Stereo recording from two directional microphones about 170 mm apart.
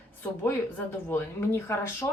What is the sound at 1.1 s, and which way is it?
Speech, 15° left (ahead or behind).